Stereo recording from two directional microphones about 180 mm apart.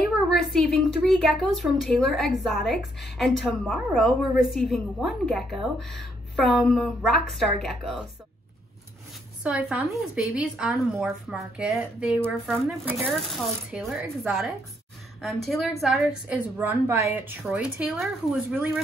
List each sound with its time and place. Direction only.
0.3 s a woman's voice: centre (ahead or behind)
9.4 s a woman's voice: 5° right (ahead or behind)
16.5 s a woman's voice: 15° right (ahead or behind)